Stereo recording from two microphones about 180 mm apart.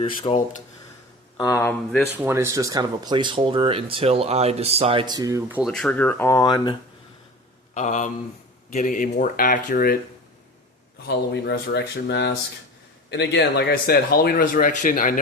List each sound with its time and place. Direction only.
0.0 s speech: 35° left (ahead or behind)
1.4 s speech: 15° left (ahead or behind)
2.1 s speech: 15° right (ahead or behind)
5.5 s speech: 10° right (ahead or behind)
5.7 s speech: 5° left (ahead or behind); by 6.7 s 20° left (ahead or behind)
7.7 s speech: 40° left (ahead or behind)
11.0 s speech: 70° left (ahead or behind); by 15.2 s 50° left (ahead or behind)